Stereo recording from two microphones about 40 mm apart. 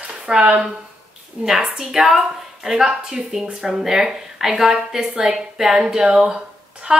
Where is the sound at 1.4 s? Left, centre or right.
Centre.